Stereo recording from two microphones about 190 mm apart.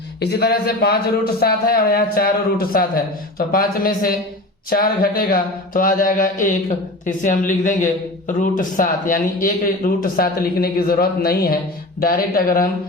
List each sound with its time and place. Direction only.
0.2 s a man's voice: 60° left (ahead or behind)